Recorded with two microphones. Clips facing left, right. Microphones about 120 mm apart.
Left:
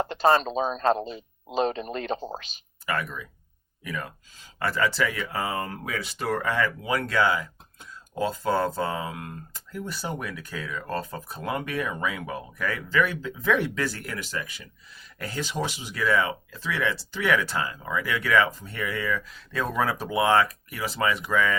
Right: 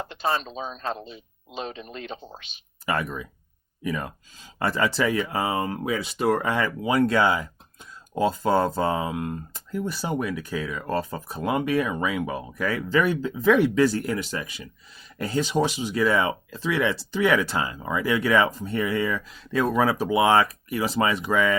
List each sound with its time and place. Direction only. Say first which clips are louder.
0.0 s speech: left 6 dB; 45° left (ahead or behind)
2.8 s speech: right 3 dB; 20° right (ahead or behind)
12.9 s speech: right 3 dB; 25° right (ahead or behind)
13.5 s speech: right 7 dB; 15° right (ahead or behind)